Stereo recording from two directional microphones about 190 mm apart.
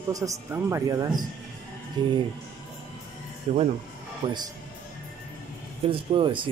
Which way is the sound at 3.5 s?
35° right (ahead or behind).